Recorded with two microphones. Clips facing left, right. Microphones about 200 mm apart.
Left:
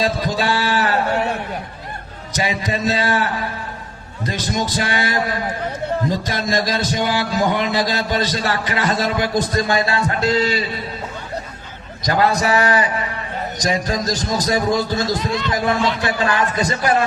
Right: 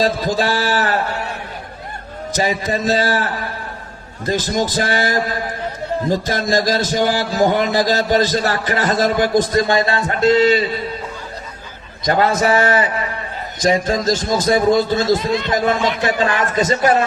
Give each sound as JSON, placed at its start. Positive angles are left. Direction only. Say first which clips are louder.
{"t": 0.0, "sound": "a man's voice", "louder": "right 3 dB", "side_deg": -45}
{"t": 2.4, "sound": "a man's voice", "louder": "right 2 dB", "side_deg": -45}
{"t": 4.5, "sound": "a man's voice", "louder": "right 1 dB", "side_deg": -50}
{"t": 6.3, "sound": "a man's voice", "louder": "right 3 dB", "side_deg": -45}
{"t": 9.3, "sound": "a man's voice", "louder": "right 4 dB", "side_deg": -25}
{"t": 12.0, "sound": "a man's voice", "louder": "right 2 dB", "side_deg": -25}